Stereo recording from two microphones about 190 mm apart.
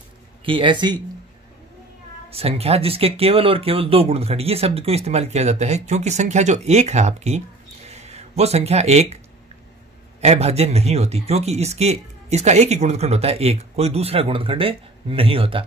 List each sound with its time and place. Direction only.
0.5 s speech: 25° right (ahead or behind)
2.2 s speech: 30° right (ahead or behind)
10.2 s speech: 35° right (ahead or behind)